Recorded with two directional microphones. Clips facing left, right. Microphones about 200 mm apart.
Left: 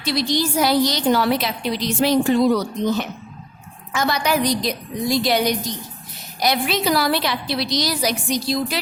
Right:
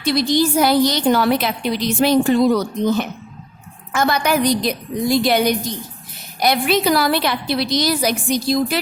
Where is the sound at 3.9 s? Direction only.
50° right (ahead or behind).